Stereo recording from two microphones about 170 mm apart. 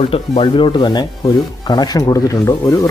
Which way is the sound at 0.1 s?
30° left (ahead or behind).